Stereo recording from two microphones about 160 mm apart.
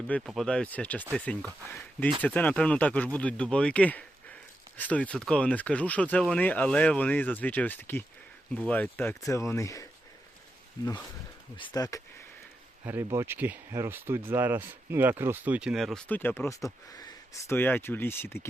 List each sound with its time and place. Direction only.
0.1 s speech: 5° left (ahead or behind); by 9.9 s 20° left (ahead or behind)
11.5 s speech: 30° left (ahead or behind)
12.8 s speech: 15° right (ahead or behind); by 18.4 s 15° left (ahead or behind)